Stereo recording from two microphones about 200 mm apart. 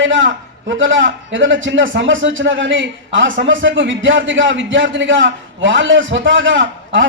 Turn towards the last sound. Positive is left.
turn(degrees=-70)  # may be behind; listen again after turning